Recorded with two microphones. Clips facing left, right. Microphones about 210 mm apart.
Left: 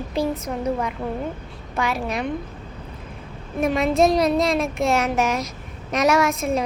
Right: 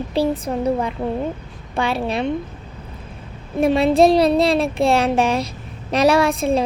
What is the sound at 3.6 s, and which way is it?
Speech, 30° right (ahead or behind).